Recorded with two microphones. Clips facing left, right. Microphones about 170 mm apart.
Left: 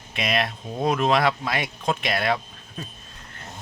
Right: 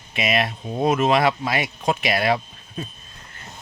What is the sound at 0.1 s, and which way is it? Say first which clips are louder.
Speech: right 3 dB; 5° right (ahead or behind).